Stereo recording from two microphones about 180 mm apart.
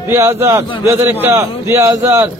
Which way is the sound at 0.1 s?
15° right (ahead or behind).